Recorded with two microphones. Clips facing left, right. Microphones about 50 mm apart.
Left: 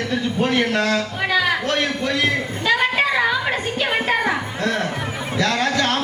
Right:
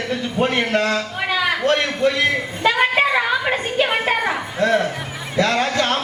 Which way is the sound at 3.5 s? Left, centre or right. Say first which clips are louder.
Right 2 dB; centre.